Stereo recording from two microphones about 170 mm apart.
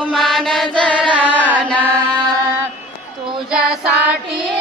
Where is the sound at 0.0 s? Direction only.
Centre (ahead or behind).